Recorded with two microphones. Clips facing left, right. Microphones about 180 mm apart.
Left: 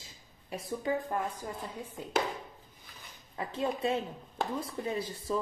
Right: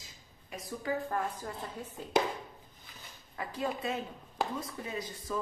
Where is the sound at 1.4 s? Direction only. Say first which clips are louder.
Left 1 dB; 10° left (ahead or behind).